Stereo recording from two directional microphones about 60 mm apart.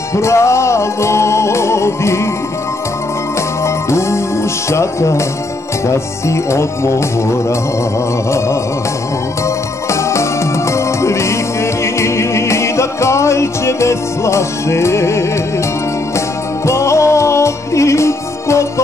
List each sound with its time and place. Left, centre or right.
0.1 s music: left
3.6 s music: left
10.0 s music: left
16.6 s music: left